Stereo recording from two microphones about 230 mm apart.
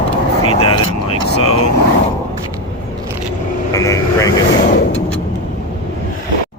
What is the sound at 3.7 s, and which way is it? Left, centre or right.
Vehicle, centre.